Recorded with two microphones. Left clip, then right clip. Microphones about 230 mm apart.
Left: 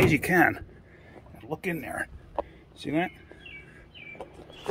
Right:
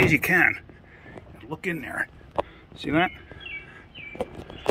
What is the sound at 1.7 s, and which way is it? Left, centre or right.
Speech, centre.